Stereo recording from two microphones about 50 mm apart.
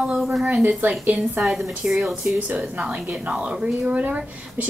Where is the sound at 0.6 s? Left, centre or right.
Right.